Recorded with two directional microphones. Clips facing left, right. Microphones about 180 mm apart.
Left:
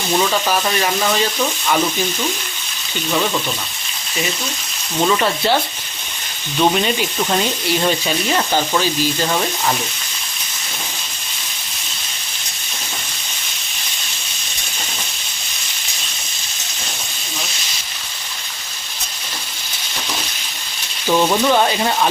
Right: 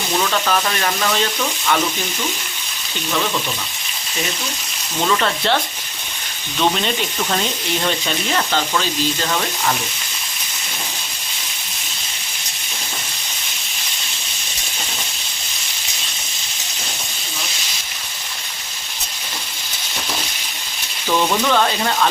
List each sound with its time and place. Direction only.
0.2 s speech: 10° left (ahead or behind)
5.0 s speech: 10° left (ahead or behind)
6.6 s speech: 15° left (ahead or behind)
21.1 s speech: 20° left (ahead or behind)